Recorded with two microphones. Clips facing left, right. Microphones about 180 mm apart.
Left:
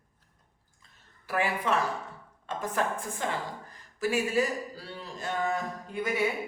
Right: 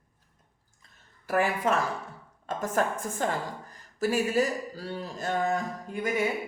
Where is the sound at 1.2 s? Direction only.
45° right (ahead or behind).